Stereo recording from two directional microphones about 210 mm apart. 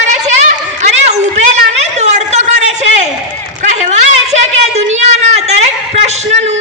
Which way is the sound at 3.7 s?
35° right (ahead or behind).